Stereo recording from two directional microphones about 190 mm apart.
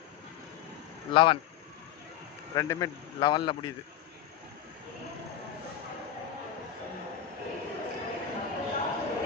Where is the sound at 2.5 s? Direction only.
15° left (ahead or behind).